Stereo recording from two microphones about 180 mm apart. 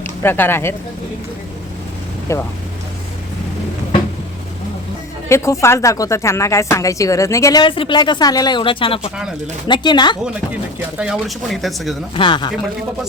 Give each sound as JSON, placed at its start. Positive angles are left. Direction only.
{"t": 0.0, "sound": "speech", "side_deg": 10}
{"t": 2.3, "sound": "speech", "side_deg": 15}
{"t": 5.3, "sound": "speech", "side_deg": 15}
{"t": 10.5, "sound": "speech", "side_deg": -5}
{"t": 12.1, "sound": "speech", "side_deg": 25}